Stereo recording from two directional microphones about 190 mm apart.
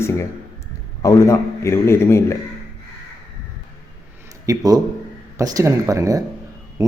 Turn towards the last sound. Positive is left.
turn(degrees=-20)  # may be behind; listen again after turning